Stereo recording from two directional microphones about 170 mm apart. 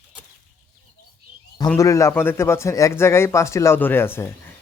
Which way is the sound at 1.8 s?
20° left (ahead or behind).